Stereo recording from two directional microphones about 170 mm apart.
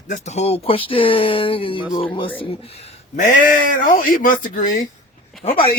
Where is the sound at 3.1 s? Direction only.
50° left (ahead or behind).